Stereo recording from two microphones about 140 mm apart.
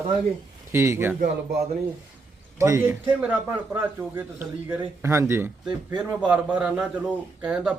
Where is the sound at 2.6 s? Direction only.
20° right (ahead or behind).